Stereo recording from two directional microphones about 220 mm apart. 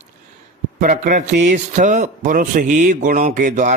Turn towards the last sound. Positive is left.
turn(degrees=-35)  # may be behind; listen again after turning